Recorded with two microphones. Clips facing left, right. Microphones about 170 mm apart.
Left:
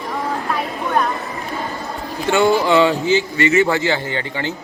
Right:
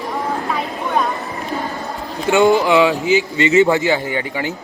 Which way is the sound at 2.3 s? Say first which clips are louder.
Right 2 dB; 20° right (ahead or behind).